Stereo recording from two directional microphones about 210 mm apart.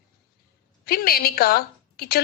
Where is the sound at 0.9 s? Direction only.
45° left (ahead or behind).